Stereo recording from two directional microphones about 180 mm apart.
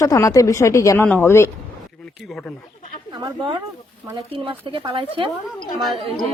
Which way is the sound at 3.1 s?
25° right (ahead or behind).